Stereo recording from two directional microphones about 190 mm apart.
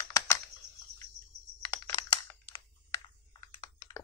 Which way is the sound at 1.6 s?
20° left (ahead or behind).